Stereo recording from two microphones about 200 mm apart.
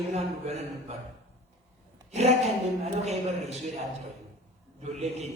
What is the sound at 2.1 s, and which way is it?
A man's voice, 30° right (ahead or behind).